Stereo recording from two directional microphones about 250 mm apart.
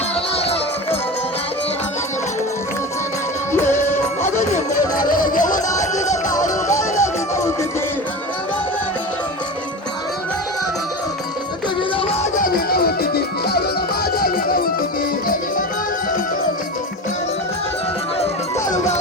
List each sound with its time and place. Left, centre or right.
0.3 s music: left
3.7 s music: left
5.0 s music: left
6.5 s music: centre
11.8 s music: left
12.4 s music: left